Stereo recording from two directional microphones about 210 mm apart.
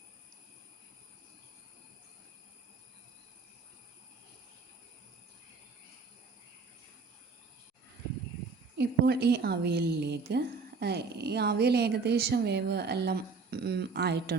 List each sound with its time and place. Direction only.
8.8 s a woman's voice: 50° right (ahead or behind)